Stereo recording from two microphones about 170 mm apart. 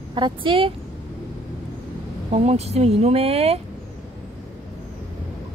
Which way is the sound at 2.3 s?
40° right (ahead or behind).